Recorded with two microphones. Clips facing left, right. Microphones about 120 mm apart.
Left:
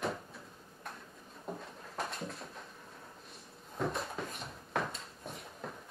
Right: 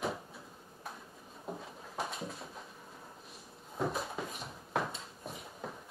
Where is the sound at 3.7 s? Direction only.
Centre (ahead or behind).